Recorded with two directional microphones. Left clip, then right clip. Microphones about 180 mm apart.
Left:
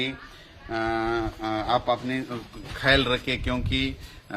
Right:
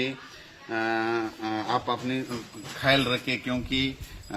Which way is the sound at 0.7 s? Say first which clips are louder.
Left 1 dB; 30° left (ahead or behind).